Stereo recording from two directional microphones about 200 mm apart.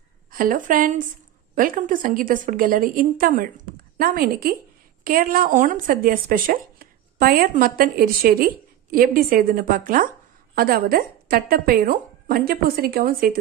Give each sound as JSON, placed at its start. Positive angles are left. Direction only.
{"t": 0.3, "sound": "a woman's voice", "side_deg": -45}